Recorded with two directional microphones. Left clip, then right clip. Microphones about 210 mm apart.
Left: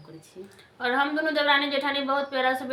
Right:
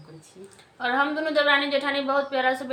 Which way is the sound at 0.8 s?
5° right (ahead or behind).